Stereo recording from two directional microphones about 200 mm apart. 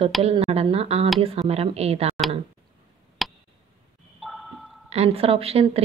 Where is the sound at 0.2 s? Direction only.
30° right (ahead or behind).